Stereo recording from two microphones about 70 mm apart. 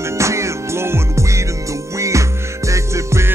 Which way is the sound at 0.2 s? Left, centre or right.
Right.